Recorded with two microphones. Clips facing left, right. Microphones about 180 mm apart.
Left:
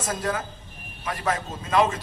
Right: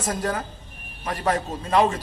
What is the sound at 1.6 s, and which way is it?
Speech, 35° right (ahead or behind).